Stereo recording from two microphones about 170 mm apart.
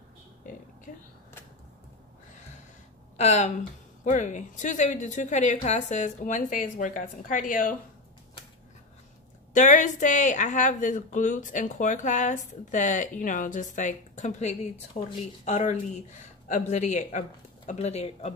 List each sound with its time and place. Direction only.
0.9 s speech: 50° left (ahead or behind)
3.2 s speech: 40° left (ahead or behind)
9.5 s speech: 50° left (ahead or behind)